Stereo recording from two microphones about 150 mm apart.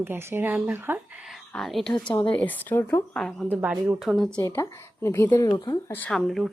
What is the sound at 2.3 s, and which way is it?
Speech, 10° left (ahead or behind).